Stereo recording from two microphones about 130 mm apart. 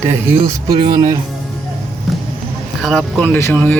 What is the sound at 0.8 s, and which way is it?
Speech, 30° right (ahead or behind).